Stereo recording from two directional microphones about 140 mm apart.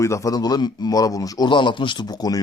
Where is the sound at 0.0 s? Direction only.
20° left (ahead or behind).